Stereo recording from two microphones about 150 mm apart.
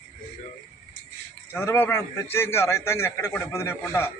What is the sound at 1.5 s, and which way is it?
A man's voice, 15° left (ahead or behind).